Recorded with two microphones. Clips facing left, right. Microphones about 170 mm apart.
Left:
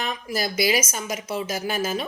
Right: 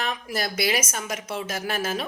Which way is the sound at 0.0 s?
Centre (ahead or behind).